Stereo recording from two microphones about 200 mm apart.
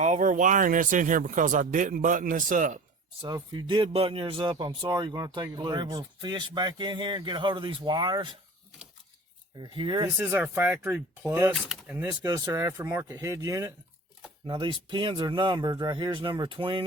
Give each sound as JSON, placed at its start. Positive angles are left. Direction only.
{"t": 0.0, "sound": "speech", "side_deg": -40}
{"t": 3.2, "sound": "speech", "side_deg": -20}
{"t": 9.6, "sound": "speech", "side_deg": -25}
{"t": 10.2, "sound": "speech", "side_deg": -10}